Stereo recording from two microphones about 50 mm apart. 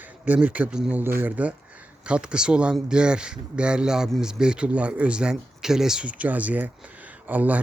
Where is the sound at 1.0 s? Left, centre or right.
Right.